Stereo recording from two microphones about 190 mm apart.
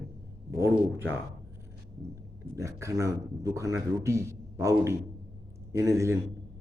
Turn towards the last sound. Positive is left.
turn(degrees=-15)  # may be behind; listen again after turning